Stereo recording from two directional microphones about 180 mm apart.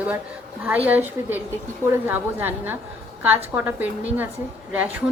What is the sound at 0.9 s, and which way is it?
A woman's voice, 10° right (ahead or behind).